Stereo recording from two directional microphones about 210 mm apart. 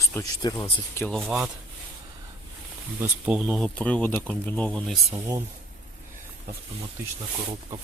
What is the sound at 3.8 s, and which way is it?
Speech, 5° left (ahead or behind).